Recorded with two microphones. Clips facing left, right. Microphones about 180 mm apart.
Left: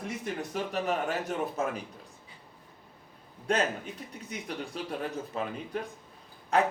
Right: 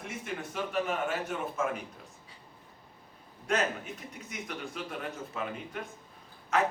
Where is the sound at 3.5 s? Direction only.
30° left (ahead or behind).